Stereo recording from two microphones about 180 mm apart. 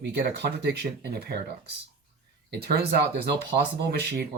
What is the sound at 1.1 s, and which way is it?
Speech, 60° right (ahead or behind).